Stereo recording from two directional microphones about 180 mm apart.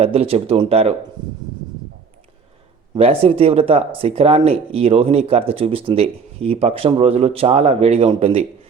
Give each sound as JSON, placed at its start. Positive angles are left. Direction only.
{"t": 0.0, "sound": "speech", "side_deg": -35}
{"t": 2.9, "sound": "speech", "side_deg": -30}